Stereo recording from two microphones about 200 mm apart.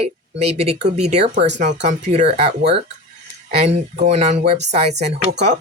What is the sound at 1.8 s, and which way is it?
Speech, 35° right (ahead or behind).